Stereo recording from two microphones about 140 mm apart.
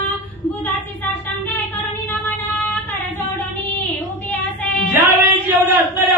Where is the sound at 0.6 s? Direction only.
15° left (ahead or behind).